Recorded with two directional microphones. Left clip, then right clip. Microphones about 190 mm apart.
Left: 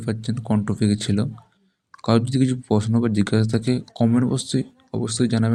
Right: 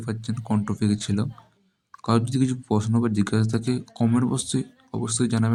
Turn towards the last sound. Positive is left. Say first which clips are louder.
# left 3 dB
turn(degrees=15)  # may be behind; listen again after turning